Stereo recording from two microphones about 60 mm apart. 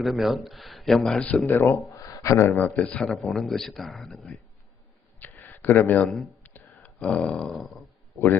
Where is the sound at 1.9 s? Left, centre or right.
Left.